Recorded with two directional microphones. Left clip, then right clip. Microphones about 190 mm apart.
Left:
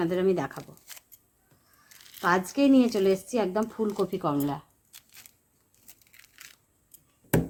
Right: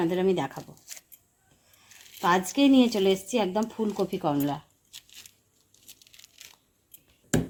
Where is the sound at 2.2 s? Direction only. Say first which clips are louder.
Right 1 dB; 20° right (ahead or behind).